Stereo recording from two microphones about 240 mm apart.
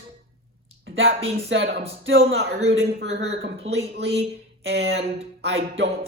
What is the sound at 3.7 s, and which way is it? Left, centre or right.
Speech, right.